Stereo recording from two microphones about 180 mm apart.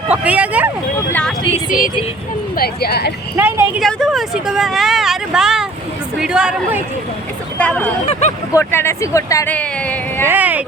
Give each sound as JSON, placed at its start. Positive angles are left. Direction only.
{"t": 0.1, "sound": "speech", "side_deg": -10}
{"t": 0.9, "sound": "speech", "side_deg": 10}
{"t": 2.6, "sound": "speech", "side_deg": 60}
{"t": 3.3, "sound": "speech", "side_deg": -15}
{"t": 3.8, "sound": "a woman's voice", "side_deg": 0}
{"t": 7.6, "sound": "speech", "side_deg": 5}
{"t": 8.2, "sound": "speech", "side_deg": 40}
{"t": 8.5, "sound": "speech", "side_deg": 15}
{"t": 10.2, "sound": "speech", "side_deg": -10}